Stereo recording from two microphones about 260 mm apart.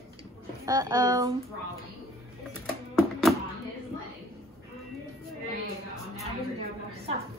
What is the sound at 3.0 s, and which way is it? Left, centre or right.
Music, centre.